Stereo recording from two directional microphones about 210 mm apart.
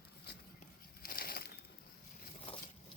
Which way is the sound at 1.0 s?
45° left (ahead or behind).